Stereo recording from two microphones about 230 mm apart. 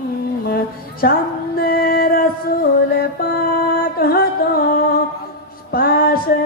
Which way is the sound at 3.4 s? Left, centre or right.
Left.